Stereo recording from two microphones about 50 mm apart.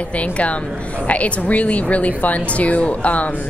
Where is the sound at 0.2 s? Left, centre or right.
Left.